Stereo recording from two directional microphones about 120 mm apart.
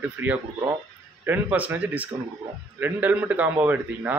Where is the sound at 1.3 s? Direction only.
15° right (ahead or behind).